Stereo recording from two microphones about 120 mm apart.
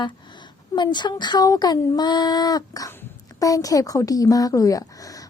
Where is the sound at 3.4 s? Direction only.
30° left (ahead or behind).